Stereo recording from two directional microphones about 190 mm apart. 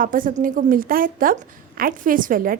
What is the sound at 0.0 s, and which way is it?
Speech, 45° right (ahead or behind).